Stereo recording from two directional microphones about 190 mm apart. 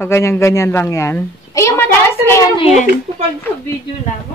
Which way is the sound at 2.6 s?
40° left (ahead or behind).